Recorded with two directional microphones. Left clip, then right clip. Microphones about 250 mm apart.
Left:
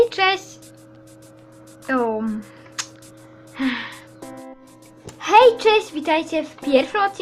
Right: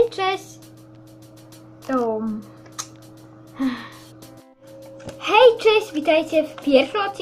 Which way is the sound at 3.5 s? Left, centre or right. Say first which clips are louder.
Left 2 dB; centre.